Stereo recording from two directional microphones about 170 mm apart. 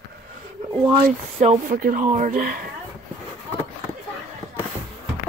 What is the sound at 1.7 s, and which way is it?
Speech, 55° right (ahead or behind).